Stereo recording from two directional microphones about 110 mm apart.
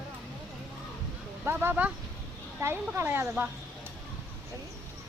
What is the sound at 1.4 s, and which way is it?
Speech, 20° right (ahead or behind).